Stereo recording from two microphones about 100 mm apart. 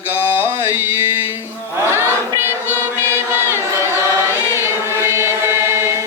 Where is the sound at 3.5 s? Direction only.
25° right (ahead or behind).